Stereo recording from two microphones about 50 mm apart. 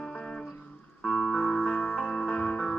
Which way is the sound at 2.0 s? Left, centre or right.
Left.